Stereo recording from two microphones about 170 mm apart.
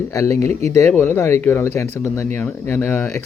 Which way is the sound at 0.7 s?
15° left (ahead or behind).